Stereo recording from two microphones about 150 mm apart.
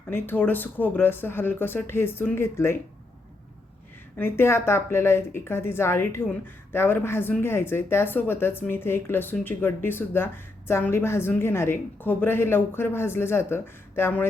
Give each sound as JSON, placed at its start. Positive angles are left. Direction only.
{"t": 0.1, "sound": "speech", "side_deg": 15}
{"t": 4.2, "sound": "speech", "side_deg": 15}